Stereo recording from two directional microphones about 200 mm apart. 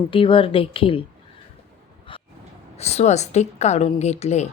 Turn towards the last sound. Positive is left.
turn(degrees=35)  # may be behind; listen again after turning